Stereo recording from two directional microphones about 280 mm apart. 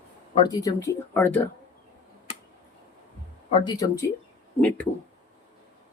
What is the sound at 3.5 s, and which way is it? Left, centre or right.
Speech, centre.